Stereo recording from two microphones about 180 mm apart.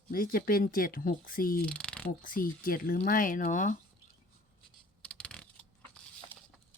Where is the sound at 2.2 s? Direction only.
50° left (ahead or behind).